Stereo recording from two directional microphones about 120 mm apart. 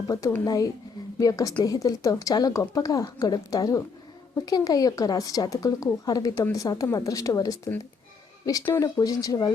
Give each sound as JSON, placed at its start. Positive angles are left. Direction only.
{"t": 0.1, "sound": "a woman's voice", "side_deg": 25}
{"t": 8.7, "sound": "a woman's voice", "side_deg": 30}